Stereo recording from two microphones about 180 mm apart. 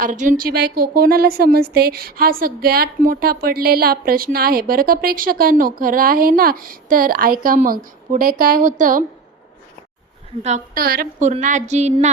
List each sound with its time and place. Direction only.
0.0 s a woman's voice: 45° right (ahead or behind)
10.8 s a woman's voice: 55° right (ahead or behind); by 12.1 s 40° right (ahead or behind)